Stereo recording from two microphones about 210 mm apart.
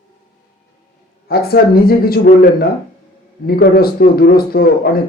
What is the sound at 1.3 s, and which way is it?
Speech, 45° left (ahead or behind).